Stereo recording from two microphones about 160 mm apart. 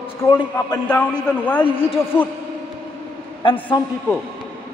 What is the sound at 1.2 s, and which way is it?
Speech, 10° left (ahead or behind).